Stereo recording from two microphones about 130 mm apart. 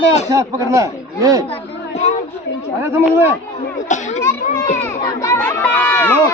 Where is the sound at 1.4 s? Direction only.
50° left (ahead or behind).